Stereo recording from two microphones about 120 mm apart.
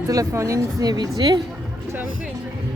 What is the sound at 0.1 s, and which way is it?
A woman's voice, 25° right (ahead or behind).